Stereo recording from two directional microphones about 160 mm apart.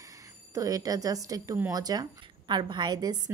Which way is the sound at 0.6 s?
20° right (ahead or behind).